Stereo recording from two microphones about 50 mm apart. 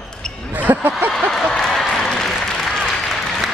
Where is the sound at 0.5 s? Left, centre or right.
Right.